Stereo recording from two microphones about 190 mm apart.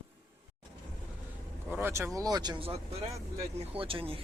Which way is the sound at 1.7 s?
10° right (ahead or behind).